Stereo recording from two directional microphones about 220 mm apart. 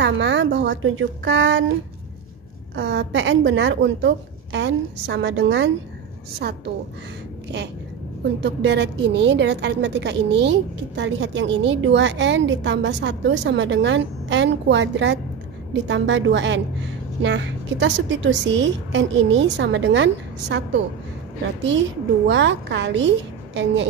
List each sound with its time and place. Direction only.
0.0 s a woman's voice: 55° right (ahead or behind)
2.7 s a woman's voice: 50° right (ahead or behind)
8.4 s a woman's voice: 50° right (ahead or behind)
22.3 s a woman's voice: 55° right (ahead or behind)